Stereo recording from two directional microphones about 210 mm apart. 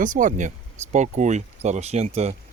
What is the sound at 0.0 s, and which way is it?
Speech, 40° right (ahead or behind).